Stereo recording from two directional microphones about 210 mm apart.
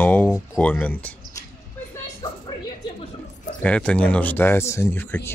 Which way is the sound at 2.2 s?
20° left (ahead or behind).